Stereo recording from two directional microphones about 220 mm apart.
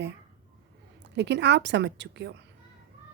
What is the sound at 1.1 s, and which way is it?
A woman's voice, 50° right (ahead or behind).